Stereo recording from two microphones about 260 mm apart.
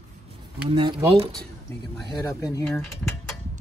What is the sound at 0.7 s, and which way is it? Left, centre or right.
Speech, centre.